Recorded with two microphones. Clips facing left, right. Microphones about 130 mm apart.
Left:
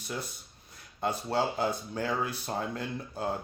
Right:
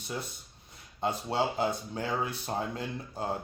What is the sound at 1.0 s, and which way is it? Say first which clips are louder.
Speech: even; 25° right (ahead or behind).